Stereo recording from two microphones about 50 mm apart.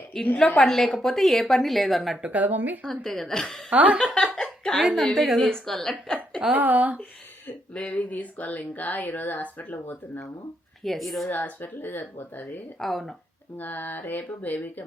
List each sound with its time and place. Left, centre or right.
0.1 s a woman's voice: centre
2.2 s speech: right
2.8 s a woman's voice: centre
3.7 s a woman's voice: right
3.9 s a woman's voice: centre
4.8 s a woman's voice: centre
5.5 s a woman's voice: centre
6.5 s speech: right
7.7 s a woman's voice: centre
7.9 s speech: left
10.8 s a woman's voice: centre
11.3 s speech: left
12.8 s a woman's voice: centre
13.6 s speech: left